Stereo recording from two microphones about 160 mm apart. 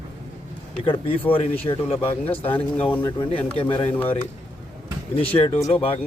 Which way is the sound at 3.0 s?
30° left (ahead or behind).